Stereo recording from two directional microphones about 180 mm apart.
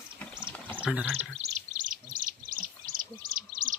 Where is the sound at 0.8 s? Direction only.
10° right (ahead or behind).